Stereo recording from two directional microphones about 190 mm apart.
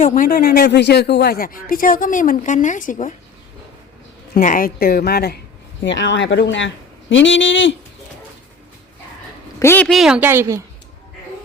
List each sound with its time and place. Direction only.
0.0 s speech: 45° left (ahead or behind)
4.4 s speech: 45° left (ahead or behind)
5.8 s speech: 75° left (ahead or behind)
9.6 s speech: 10° left (ahead or behind); by 10.6 s 15° right (ahead or behind)